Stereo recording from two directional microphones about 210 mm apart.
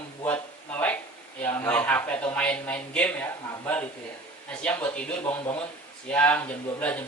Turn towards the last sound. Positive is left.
turn(degrees=5)  # may be behind; listen again after turning